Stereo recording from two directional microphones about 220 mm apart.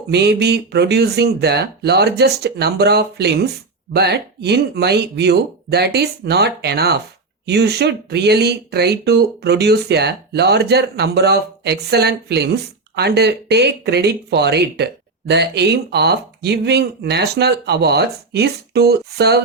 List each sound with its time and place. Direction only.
0.1 s speech: 50° right (ahead or behind)